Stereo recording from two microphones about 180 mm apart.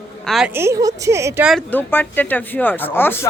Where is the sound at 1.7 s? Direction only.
10° left (ahead or behind).